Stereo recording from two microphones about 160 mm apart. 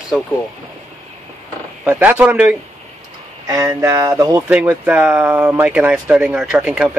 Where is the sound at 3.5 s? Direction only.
20° right (ahead or behind).